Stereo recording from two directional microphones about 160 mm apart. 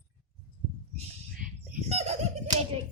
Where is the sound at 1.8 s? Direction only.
40° right (ahead or behind).